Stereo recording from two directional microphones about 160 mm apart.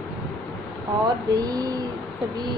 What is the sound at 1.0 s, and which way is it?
Speech, 25° right (ahead or behind).